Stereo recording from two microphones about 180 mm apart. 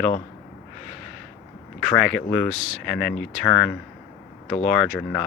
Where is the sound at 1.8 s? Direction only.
5° left (ahead or behind).